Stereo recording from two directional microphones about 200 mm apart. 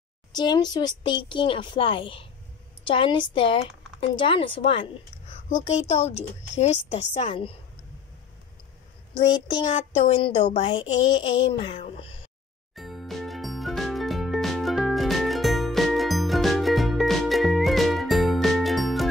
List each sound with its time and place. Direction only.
0.3 s a child's voice: 20° left (ahead or behind)
9.5 s a child's voice: 30° left (ahead or behind)
12.7 s music: centre (ahead or behind)